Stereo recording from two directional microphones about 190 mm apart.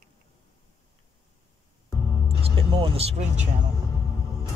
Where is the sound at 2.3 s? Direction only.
30° right (ahead or behind).